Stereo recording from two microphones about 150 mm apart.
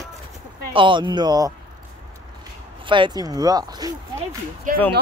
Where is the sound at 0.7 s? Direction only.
35° right (ahead or behind).